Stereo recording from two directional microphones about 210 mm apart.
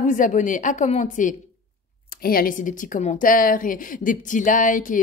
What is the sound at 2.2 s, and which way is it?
A woman's voice, 45° left (ahead or behind).